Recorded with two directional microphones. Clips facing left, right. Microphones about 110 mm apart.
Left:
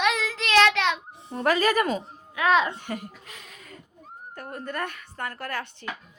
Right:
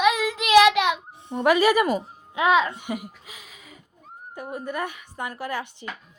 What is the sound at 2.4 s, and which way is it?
Speech, 20° right (ahead or behind).